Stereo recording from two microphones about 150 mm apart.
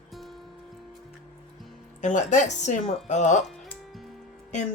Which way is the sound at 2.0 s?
55° left (ahead or behind).